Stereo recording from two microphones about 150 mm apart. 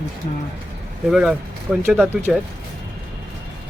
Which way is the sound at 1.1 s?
5° right (ahead or behind).